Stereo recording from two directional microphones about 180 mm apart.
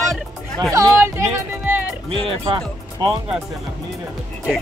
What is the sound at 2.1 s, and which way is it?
Speech, 30° right (ahead or behind).